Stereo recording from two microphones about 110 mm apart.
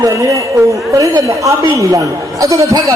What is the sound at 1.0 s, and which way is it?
A man's voice, 30° right (ahead or behind).